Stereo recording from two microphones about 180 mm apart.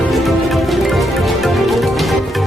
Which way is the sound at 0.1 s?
Centre (ahead or behind).